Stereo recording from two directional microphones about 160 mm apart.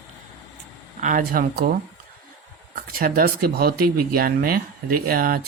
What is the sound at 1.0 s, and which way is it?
Speech, 60° right (ahead or behind).